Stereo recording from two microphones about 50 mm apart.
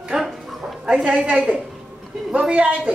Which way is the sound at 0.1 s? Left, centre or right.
Centre.